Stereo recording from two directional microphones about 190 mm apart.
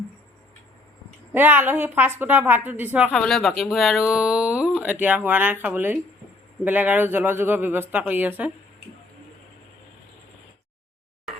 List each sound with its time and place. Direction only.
1.3 s a woman's voice: 10° right (ahead or behind)